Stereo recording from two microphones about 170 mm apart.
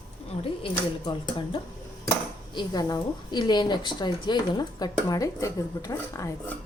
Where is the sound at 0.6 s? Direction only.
30° left (ahead or behind).